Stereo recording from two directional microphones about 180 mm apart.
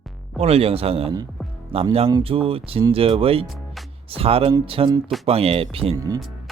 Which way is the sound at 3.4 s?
Centre (ahead or behind).